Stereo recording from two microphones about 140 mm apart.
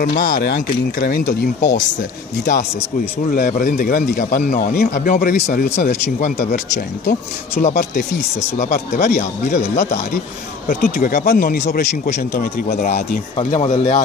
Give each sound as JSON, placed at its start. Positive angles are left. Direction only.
{"t": 0.0, "sound": "speech", "side_deg": 65}
{"t": 0.9, "sound": "speech", "side_deg": 90}
{"t": 3.3, "sound": "speech", "side_deg": 65}
{"t": 7.6, "sound": "speech", "side_deg": 90}
{"t": 8.5, "sound": "speech", "side_deg": 60}
{"t": 10.7, "sound": "speech", "side_deg": 85}
{"t": 13.4, "sound": "speech", "side_deg": 45}
{"t": 13.7, "sound": "speech", "side_deg": 60}